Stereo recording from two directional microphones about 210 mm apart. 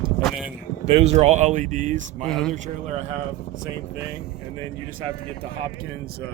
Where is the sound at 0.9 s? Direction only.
30° right (ahead or behind).